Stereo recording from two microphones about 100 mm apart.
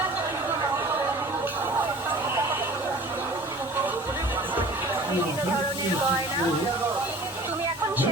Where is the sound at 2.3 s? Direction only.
30° right (ahead or behind).